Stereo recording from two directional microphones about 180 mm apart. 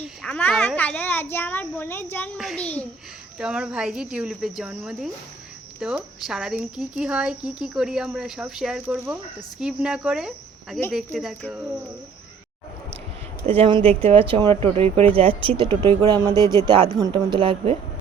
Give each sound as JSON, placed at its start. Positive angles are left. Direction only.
{"t": 0.2, "sound": "a child's voice", "side_deg": 5}
{"t": 13.6, "sound": "a woman's voice", "side_deg": -30}